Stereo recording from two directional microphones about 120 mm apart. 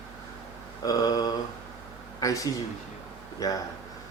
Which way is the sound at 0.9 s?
30° left (ahead or behind).